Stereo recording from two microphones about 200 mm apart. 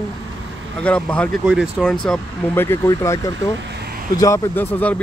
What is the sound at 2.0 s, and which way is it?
Speech, 5° left (ahead or behind).